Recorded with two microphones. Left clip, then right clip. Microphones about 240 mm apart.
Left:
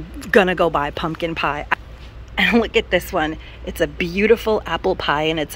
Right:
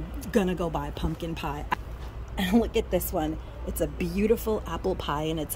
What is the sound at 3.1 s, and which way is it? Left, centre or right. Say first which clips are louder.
Speech: left 9 dB; left.